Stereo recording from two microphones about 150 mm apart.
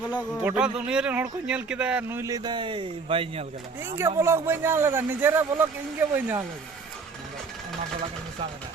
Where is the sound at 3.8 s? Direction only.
15° right (ahead or behind).